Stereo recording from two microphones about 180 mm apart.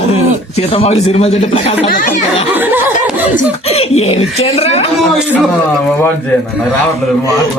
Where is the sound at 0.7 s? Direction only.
35° left (ahead or behind).